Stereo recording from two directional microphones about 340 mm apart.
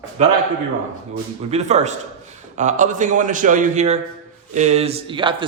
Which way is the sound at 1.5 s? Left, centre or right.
Centre.